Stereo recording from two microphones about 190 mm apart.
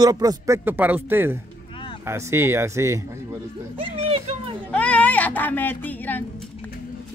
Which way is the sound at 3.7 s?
30° right (ahead or behind).